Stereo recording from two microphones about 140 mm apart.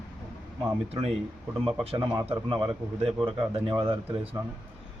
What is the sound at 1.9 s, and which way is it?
Speech, 25° right (ahead or behind).